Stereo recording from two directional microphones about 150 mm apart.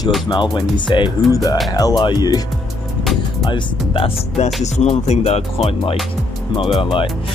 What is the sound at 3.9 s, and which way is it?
Speech, 35° left (ahead or behind).